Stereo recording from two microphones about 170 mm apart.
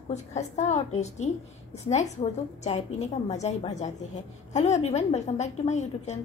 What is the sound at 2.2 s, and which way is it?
A woman's voice, 35° left (ahead or behind).